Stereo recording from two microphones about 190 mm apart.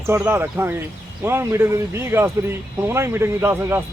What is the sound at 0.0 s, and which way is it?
Speech, 10° right (ahead or behind).